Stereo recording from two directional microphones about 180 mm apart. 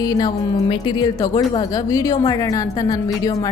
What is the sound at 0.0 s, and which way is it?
A woman's voice, 20° left (ahead or behind).